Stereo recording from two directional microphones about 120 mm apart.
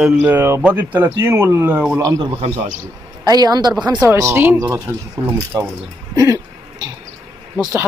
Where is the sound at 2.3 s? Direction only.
75° right (ahead or behind).